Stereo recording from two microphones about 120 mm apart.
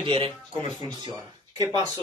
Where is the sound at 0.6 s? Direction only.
35° right (ahead or behind).